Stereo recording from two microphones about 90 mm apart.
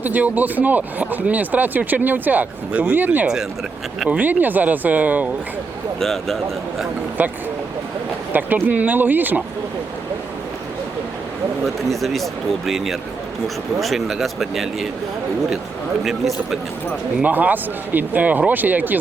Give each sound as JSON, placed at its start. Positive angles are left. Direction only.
{"t": 0.0, "sound": "speech", "side_deg": -20}
{"t": 6.0, "sound": "speech", "side_deg": 5}
{"t": 8.3, "sound": "speech", "side_deg": -20}
{"t": 11.9, "sound": "speech", "side_deg": 0}
{"t": 16.0, "sound": "speech", "side_deg": 0}
{"t": 17.2, "sound": "speech", "side_deg": -20}